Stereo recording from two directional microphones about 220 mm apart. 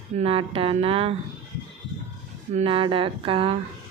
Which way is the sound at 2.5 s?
25° right (ahead or behind).